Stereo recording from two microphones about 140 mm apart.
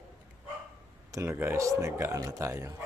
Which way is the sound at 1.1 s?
20° right (ahead or behind).